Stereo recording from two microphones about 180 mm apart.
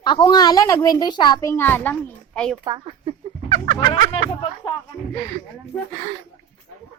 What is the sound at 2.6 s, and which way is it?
Speech, 25° right (ahead or behind).